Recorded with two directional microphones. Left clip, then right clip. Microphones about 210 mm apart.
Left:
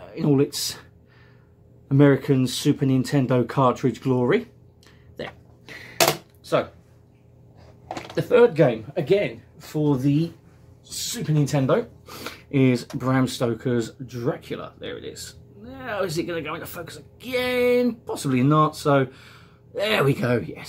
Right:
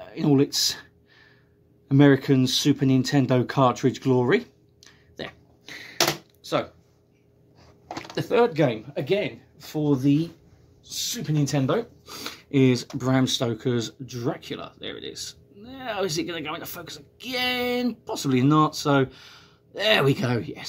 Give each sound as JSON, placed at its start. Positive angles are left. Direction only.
{"t": 0.0, "sound": "speech", "side_deg": -40}
{"t": 1.9, "sound": "speech", "side_deg": -45}
{"t": 7.9, "sound": "speech", "side_deg": -40}